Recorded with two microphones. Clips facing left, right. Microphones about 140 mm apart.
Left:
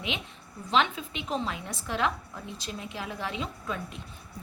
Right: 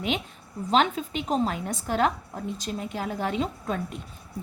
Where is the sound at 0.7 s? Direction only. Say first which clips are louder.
Right 4 dB; 40° right (ahead or behind).